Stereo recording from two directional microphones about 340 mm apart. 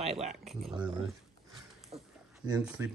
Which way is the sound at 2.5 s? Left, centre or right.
Centre.